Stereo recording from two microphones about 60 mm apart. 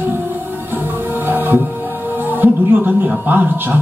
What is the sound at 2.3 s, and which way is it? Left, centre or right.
Speech, right.